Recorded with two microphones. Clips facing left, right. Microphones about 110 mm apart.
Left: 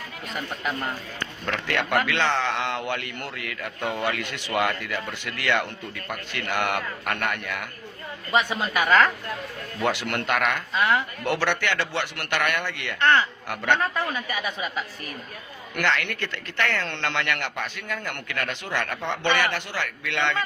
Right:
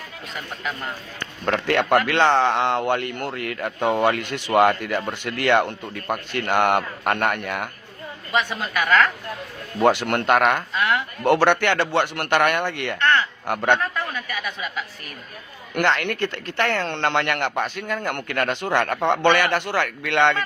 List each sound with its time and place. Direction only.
0.3 s speech: centre (ahead or behind)
1.5 s a man's voice: 45° right (ahead or behind)
8.3 s speech: 5° left (ahead or behind)
9.8 s a man's voice: 50° right (ahead or behind)
10.8 s speech: centre (ahead or behind)
11.2 s a man's voice: 50° right (ahead or behind)
13.0 s speech: 5° left (ahead or behind)
13.5 s a man's voice: 45° right (ahead or behind)
15.7 s a woman's voice: 40° right (ahead or behind)
16.9 s a man's voice: 50° right (ahead or behind)